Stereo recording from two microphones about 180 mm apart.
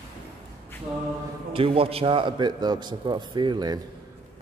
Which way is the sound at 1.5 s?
30° right (ahead or behind).